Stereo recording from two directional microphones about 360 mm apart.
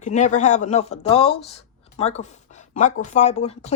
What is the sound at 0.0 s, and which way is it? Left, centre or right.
Speech, centre.